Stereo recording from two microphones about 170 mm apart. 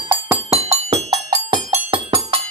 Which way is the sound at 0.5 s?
35° right (ahead or behind).